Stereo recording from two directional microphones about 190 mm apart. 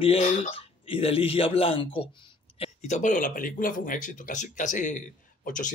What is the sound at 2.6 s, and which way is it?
Speech, 40° left (ahead or behind).